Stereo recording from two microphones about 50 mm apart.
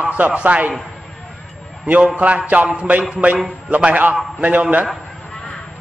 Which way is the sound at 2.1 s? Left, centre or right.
Right.